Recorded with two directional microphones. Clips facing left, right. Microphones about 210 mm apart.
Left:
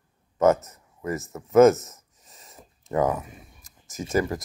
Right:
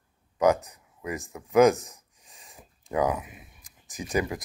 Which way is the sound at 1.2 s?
Centre (ahead or behind).